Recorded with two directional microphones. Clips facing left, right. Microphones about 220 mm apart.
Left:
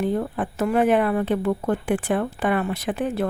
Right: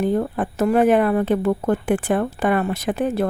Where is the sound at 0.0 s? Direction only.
45° right (ahead or behind).